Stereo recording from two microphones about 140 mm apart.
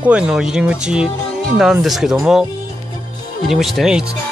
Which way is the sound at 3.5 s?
Centre (ahead or behind).